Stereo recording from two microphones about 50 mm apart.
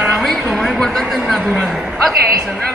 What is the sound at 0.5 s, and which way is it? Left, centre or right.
Speech, centre.